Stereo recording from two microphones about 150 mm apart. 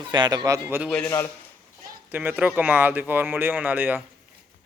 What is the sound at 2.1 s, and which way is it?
Speech, 10° right (ahead or behind).